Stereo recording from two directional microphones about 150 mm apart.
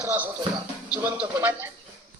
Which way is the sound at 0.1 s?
15° right (ahead or behind).